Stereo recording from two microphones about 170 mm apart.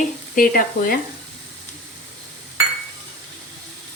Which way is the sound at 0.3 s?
55° left (ahead or behind).